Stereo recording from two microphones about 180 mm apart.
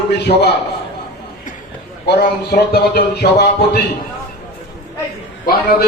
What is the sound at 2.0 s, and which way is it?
A man's voice, 60° left (ahead or behind).